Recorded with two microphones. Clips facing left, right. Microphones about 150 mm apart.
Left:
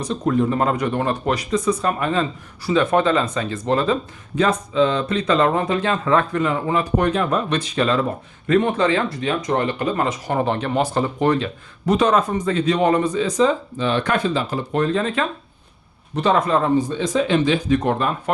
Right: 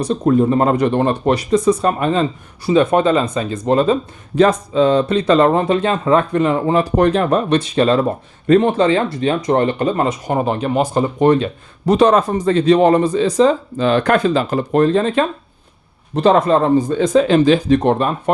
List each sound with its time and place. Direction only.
0.3 s a man's voice: 30° right (ahead or behind)
4.4 s a man's voice: 40° right (ahead or behind)
11.9 s speech: 35° right (ahead or behind)
14.8 s speech: 30° right (ahead or behind)